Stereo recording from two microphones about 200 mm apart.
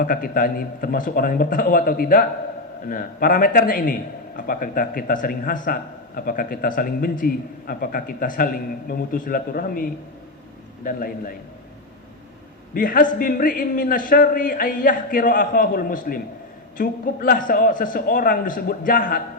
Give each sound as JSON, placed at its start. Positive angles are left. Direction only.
{"t": 0.0, "sound": "a man's voice", "side_deg": 45}
{"t": 12.7, "sound": "a man's voice", "side_deg": 45}